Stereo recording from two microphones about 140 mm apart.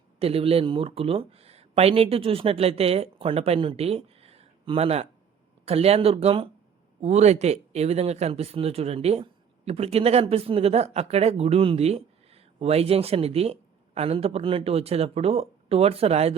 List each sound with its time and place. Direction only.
0.2 s speech: 45° right (ahead or behind)
7.0 s speech: 50° right (ahead or behind)